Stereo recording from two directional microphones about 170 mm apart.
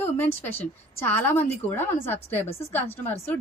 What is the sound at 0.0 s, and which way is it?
A woman's voice, 10° left (ahead or behind).